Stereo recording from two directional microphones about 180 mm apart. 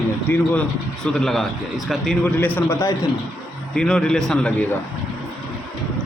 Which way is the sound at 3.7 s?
5° left (ahead or behind).